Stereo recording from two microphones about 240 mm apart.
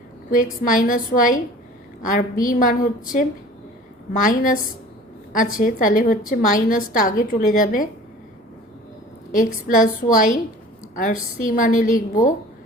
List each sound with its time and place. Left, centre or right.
0.6 s a woman's voice: left
9.3 s a woman's voice: left